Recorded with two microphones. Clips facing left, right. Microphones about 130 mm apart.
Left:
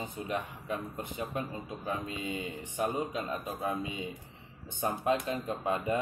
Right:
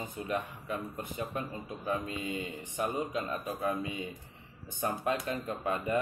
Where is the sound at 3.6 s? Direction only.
25° left (ahead or behind).